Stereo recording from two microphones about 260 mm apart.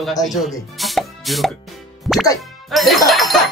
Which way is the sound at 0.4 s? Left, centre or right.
Centre.